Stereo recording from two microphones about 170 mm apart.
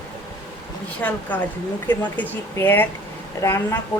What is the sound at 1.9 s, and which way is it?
Speech, 10° left (ahead or behind).